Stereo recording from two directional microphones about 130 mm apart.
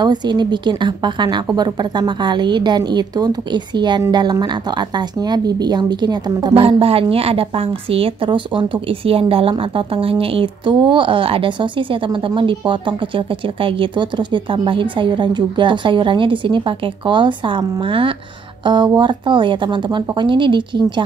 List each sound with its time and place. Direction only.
0.0 s a woman's voice: 35° right (ahead or behind)
6.5 s a woman's voice: 50° right (ahead or behind)